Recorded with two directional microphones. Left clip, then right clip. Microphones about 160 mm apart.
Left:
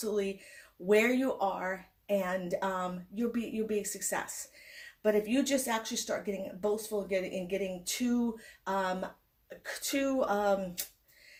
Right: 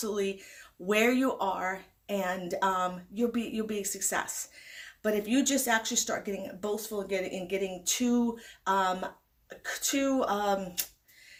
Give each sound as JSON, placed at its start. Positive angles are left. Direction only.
{"t": 0.0, "sound": "a woman's voice", "side_deg": -30}